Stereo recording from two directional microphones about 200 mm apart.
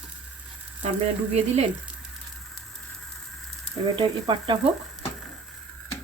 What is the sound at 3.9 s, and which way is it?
Speech, 25° right (ahead or behind).